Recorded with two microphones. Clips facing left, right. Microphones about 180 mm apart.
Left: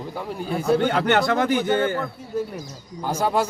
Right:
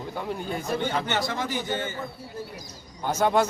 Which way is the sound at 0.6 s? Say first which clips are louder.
Left 10 dB; 65° left (ahead or behind).